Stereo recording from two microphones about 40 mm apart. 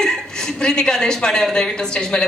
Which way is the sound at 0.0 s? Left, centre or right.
Centre.